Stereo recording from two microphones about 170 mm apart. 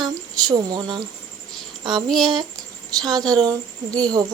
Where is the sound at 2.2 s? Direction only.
25° right (ahead or behind).